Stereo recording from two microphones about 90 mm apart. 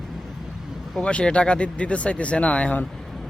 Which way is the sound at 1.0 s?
10° left (ahead or behind).